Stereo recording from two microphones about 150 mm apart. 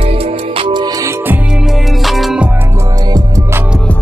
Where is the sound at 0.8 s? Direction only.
20° right (ahead or behind); by 2.5 s 5° right (ahead or behind).